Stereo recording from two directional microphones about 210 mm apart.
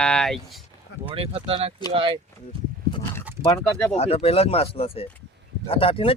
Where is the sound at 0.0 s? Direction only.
5° left (ahead or behind).